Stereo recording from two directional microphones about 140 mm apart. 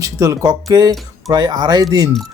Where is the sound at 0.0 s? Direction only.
25° right (ahead or behind).